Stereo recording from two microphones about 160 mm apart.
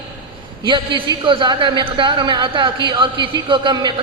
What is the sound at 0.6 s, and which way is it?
A man's voice, 30° right (ahead or behind).